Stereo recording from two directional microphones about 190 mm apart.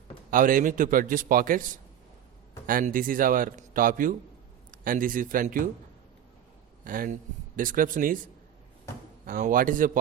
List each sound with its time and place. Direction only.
0.3 s a man's voice: 45° right (ahead or behind)
6.8 s a man's voice: 45° right (ahead or behind)